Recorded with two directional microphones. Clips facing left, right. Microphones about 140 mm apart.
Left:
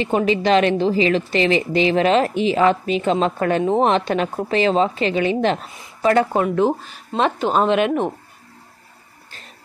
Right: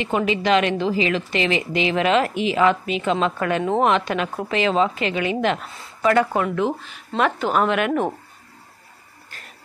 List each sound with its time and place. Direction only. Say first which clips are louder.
0.0 s a woman's voice: left 3 dB; 35° left (ahead or behind)
7.2 s a woman's voice: left 2 dB; 25° left (ahead or behind)